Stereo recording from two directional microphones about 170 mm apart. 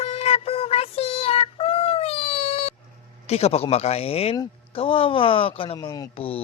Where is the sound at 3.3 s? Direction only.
35° left (ahead or behind).